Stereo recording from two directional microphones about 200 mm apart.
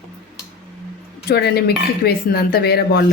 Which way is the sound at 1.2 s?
50° left (ahead or behind).